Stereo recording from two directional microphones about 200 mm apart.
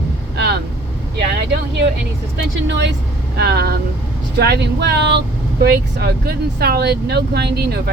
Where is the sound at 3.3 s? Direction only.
55° right (ahead or behind).